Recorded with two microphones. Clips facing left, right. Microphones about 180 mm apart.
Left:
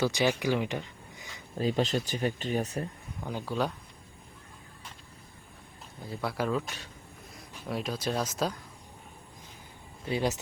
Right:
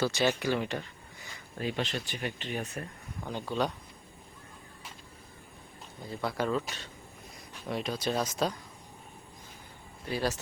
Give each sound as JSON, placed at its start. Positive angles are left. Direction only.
{"t": 0.0, "sound": "speech", "side_deg": 15}
{"t": 1.5, "sound": "speech", "side_deg": 40}
{"t": 3.2, "sound": "speech", "side_deg": 5}
{"t": 6.1, "sound": "speech", "side_deg": 5}
{"t": 10.1, "sound": "speech", "side_deg": 20}